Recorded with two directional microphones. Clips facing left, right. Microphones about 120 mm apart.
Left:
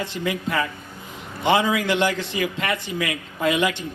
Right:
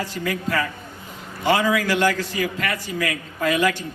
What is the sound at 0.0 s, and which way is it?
A man's voice, 20° left (ahead or behind).